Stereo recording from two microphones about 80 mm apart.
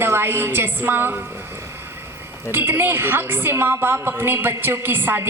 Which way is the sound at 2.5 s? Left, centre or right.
Right.